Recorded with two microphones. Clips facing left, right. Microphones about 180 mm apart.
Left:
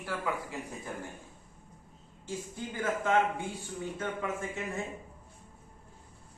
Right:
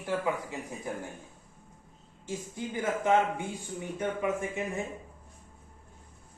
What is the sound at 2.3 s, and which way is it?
A man's voice, 15° right (ahead or behind).